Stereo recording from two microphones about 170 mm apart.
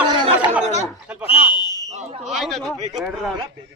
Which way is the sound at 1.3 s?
30° left (ahead or behind).